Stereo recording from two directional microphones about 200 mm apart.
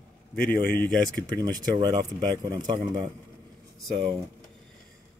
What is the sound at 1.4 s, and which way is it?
Speech, 20° right (ahead or behind).